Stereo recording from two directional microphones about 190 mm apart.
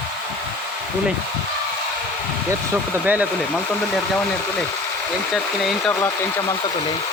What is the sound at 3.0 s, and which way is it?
Speech, 10° right (ahead or behind).